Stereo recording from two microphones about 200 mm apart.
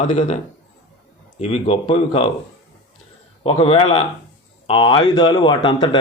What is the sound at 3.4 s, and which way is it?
Speech, 30° left (ahead or behind).